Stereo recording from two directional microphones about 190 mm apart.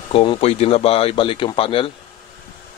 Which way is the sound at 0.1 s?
30° left (ahead or behind).